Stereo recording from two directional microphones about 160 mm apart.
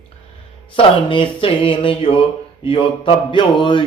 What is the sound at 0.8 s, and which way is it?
Mantra, 35° left (ahead or behind).